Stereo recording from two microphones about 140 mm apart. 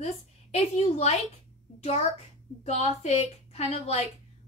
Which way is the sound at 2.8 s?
50° left (ahead or behind).